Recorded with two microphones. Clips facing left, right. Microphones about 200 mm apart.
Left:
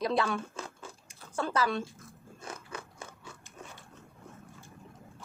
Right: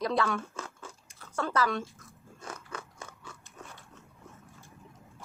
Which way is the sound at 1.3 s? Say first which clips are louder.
Even; 25° left (ahead or behind).